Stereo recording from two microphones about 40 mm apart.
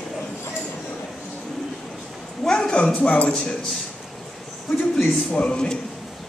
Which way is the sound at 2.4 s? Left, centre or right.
Centre.